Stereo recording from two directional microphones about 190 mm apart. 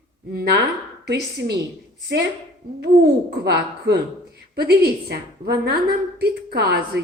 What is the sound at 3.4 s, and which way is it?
A woman's voice, 60° right (ahead or behind).